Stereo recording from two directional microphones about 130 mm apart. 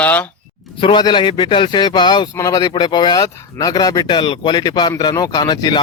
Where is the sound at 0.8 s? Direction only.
35° left (ahead or behind).